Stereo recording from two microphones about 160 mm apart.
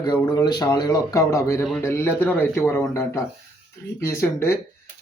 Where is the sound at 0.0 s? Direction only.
25° left (ahead or behind).